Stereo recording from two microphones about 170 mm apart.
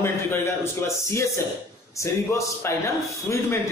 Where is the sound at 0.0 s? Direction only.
15° left (ahead or behind).